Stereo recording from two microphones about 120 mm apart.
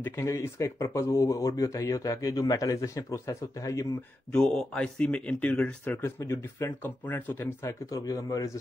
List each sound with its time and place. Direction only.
0.0 s speech: 25° left (ahead or behind)
4.3 s speech: 5° left (ahead or behind); by 8.5 s 30° left (ahead or behind)